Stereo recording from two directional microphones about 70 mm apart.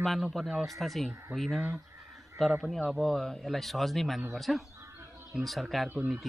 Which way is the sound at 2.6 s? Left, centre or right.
Centre.